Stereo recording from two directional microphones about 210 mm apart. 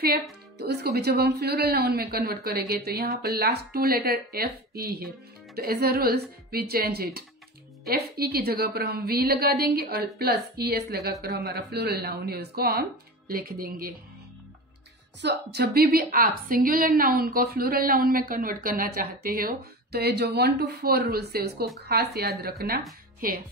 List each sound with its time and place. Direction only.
0.6 s a woman's voice: 50° right (ahead or behind)
15.2 s a woman's voice: 50° right (ahead or behind)